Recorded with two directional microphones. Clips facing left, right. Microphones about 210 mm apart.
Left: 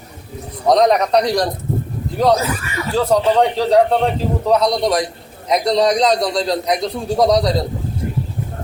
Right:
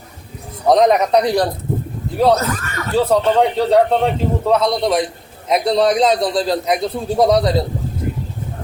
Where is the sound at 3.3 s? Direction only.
5° right (ahead or behind).